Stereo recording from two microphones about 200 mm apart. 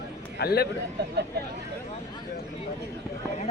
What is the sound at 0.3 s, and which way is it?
Speech, 55° left (ahead or behind).